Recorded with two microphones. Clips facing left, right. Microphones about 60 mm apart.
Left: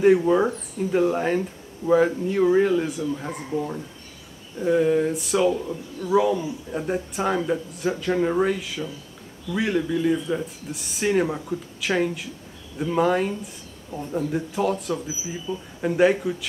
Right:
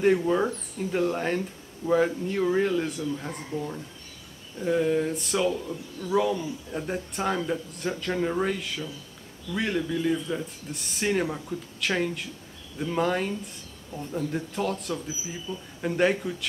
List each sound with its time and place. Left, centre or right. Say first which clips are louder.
0.3 s speech: left 5 dB; centre
13.9 s speech: left 4 dB; left
14.3 s speech: left 7 dB; centre
15.5 s speech: left 6 dB; centre
15.8 s speech: left 5 dB; centre